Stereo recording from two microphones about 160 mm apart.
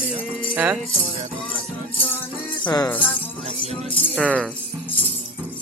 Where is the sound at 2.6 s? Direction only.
25° left (ahead or behind).